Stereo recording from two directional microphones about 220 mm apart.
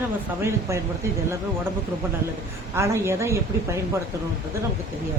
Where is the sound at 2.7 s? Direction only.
10° right (ahead or behind).